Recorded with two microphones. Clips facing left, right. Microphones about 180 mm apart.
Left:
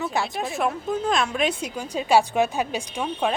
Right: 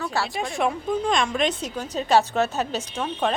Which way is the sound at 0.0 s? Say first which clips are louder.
Left 1 dB; 15° left (ahead or behind).